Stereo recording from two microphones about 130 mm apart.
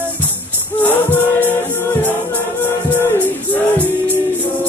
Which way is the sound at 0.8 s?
15° left (ahead or behind).